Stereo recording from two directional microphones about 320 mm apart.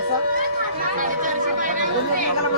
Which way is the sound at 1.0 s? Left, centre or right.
Right.